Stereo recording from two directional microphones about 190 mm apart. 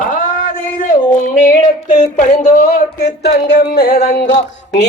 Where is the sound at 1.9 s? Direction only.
40° left (ahead or behind).